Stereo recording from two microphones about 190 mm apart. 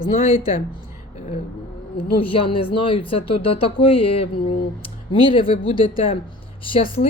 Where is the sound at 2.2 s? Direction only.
30° left (ahead or behind).